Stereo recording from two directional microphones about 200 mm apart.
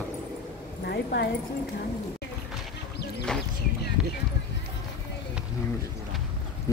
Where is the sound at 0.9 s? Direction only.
50° left (ahead or behind).